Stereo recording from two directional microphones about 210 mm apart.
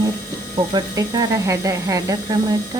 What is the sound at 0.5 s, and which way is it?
Speech, 20° right (ahead or behind).